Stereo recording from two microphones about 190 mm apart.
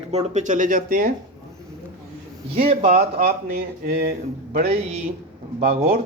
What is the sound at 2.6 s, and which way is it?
Speech, 50° right (ahead or behind).